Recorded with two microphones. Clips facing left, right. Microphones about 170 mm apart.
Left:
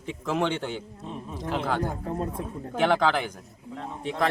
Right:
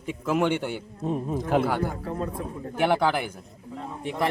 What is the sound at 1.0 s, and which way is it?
Speech, 45° right (ahead or behind).